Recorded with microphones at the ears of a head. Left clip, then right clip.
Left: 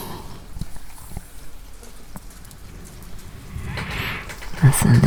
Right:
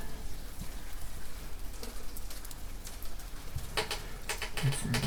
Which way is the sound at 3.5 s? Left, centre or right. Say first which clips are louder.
Left 6 dB; left.